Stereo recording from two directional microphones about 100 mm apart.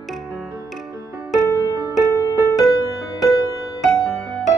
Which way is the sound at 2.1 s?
35° left (ahead or behind).